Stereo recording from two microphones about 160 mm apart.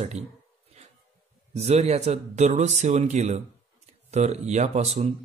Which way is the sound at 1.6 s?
40° right (ahead or behind).